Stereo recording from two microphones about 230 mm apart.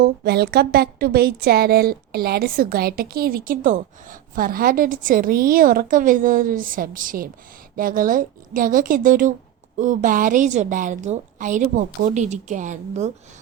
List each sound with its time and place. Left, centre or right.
0.0 s a woman's voice: right